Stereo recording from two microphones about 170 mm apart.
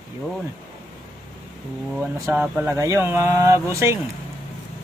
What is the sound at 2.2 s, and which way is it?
Speech, 10° right (ahead or behind).